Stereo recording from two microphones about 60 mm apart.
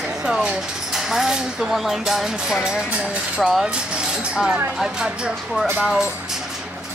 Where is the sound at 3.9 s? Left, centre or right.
Centre.